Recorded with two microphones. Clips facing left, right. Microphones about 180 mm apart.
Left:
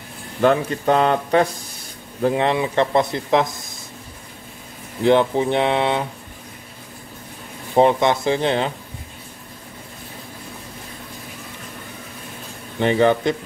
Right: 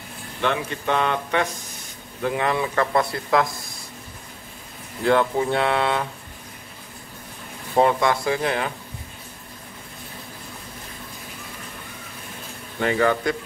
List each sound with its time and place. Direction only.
0.4 s speech: 40° left (ahead or behind); by 3.7 s 20° left (ahead or behind)
5.0 s speech: 20° left (ahead or behind)
7.7 s speech: 20° left (ahead or behind)
12.7 s speech: 25° left (ahead or behind)